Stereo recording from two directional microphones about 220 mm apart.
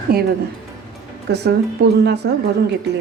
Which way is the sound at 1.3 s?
50° right (ahead or behind).